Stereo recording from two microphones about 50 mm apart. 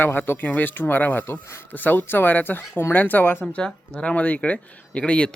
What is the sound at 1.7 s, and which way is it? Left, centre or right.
Speech, left.